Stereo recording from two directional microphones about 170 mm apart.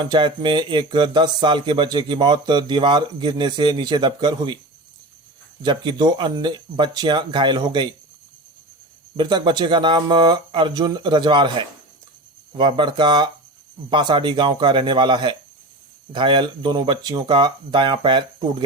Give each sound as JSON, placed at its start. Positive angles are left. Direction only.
{"t": 0.1, "sound": "speech", "side_deg": -25}
{"t": 5.6, "sound": "speech", "side_deg": -25}
{"t": 9.1, "sound": "speech", "side_deg": -25}